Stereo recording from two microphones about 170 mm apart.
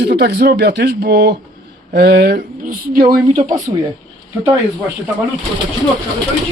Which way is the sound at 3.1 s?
55° right (ahead or behind).